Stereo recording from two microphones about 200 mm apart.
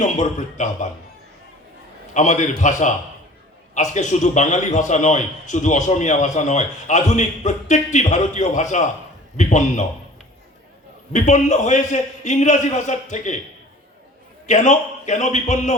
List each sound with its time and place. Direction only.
0.0 s a man's voice: 35° left (ahead or behind)
2.1 s a man's voice: 35° left (ahead or behind)
11.1 s a man's voice: 35° left (ahead or behind)
14.4 s a man's voice: 35° left (ahead or behind)